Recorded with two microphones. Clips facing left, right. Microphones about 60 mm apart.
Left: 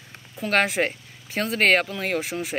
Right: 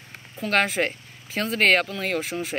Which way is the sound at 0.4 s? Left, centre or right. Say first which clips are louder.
Left 1 dB; centre.